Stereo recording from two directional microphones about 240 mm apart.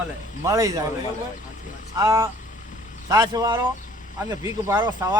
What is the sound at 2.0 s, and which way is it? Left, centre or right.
Speech, centre.